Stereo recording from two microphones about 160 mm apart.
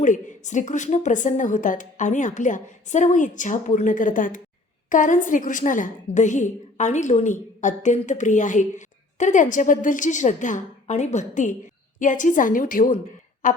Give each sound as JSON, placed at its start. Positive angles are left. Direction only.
{"t": 0.0, "sound": "a woman's voice", "side_deg": 55}